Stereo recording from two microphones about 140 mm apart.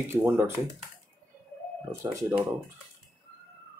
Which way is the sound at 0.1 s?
20° right (ahead or behind).